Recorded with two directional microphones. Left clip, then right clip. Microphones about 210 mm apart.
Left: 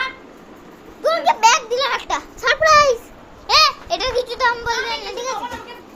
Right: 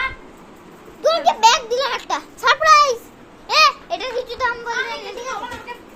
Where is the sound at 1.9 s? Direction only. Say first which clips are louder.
Left 1 dB; 5° right (ahead or behind).